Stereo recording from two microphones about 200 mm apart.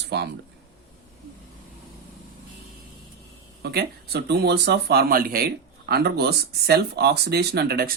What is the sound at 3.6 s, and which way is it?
Speech, 55° right (ahead or behind).